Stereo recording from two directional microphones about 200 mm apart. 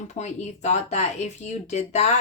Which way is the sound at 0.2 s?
35° left (ahead or behind).